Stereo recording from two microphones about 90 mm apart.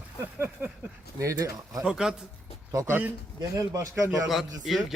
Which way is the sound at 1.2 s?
35° right (ahead or behind).